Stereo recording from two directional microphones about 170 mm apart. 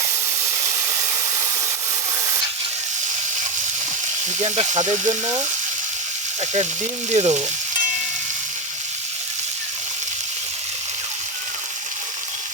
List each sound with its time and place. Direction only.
4.4 s speech: 40° right (ahead or behind)
7.1 s frying: 40° right (ahead or behind)